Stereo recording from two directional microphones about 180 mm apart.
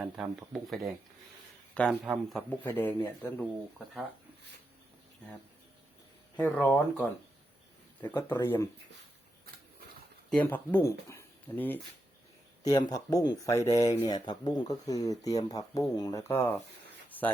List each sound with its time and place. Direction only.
0.0 s speech: centre (ahead or behind)
6.4 s speech: 10° left (ahead or behind)
8.1 s speech: 15° left (ahead or behind)
10.2 s speech: 5° left (ahead or behind)
12.9 s speech: 20° left (ahead or behind)
17.1 s a sound: 10° left (ahead or behind)